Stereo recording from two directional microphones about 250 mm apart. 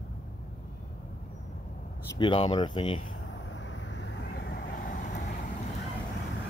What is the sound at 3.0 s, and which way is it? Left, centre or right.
Vehicle, left.